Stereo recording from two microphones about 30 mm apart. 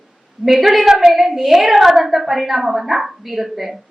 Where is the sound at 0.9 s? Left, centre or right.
Right.